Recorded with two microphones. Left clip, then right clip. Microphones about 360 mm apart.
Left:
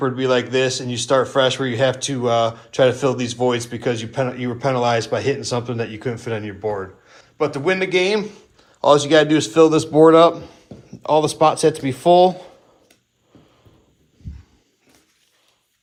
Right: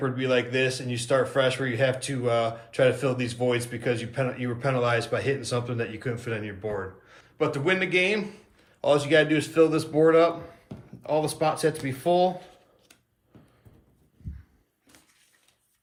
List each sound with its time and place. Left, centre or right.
0.0 s a man's voice: centre
9.0 s a man's voice: left
9.3 s a man's voice: centre